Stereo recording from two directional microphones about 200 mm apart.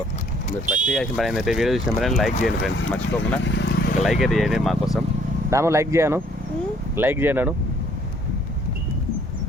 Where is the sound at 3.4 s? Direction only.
60° left (ahead or behind).